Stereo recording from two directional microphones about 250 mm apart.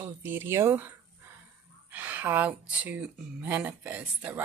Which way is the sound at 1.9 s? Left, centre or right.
Centre.